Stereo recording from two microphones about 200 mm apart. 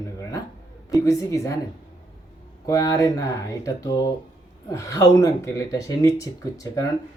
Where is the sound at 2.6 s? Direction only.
15° left (ahead or behind).